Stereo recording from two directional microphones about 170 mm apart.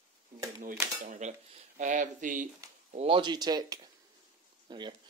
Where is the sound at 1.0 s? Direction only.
55° right (ahead or behind).